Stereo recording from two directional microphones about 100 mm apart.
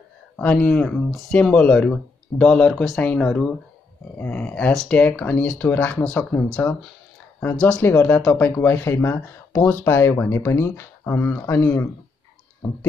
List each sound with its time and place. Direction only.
0.4 s speech: 10° left (ahead or behind)
7.8 s speech: 20° left (ahead or behind)